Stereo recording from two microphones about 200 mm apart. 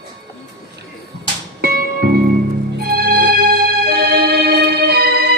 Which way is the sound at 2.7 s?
50° right (ahead or behind).